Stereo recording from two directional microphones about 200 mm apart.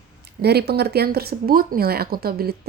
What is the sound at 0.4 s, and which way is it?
A woman's voice, 55° right (ahead or behind).